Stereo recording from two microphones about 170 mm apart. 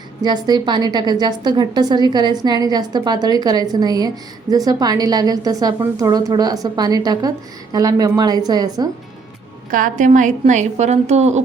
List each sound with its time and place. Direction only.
0.2 s a woman's voice: 25° right (ahead or behind)
9.6 s a woman's voice: 50° right (ahead or behind)